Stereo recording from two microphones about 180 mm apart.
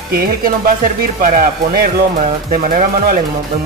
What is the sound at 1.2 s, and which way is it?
Speech, 50° right (ahead or behind).